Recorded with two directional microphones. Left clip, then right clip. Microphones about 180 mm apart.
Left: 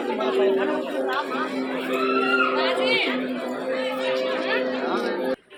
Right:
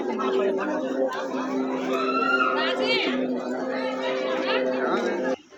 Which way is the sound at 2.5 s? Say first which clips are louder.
Left 2 dB; 65° right (ahead or behind).